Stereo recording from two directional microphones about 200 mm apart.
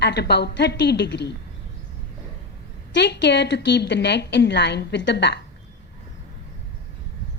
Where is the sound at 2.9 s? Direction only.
55° left (ahead or behind).